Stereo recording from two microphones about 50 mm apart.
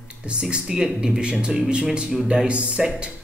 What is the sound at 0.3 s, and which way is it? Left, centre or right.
Speech, centre.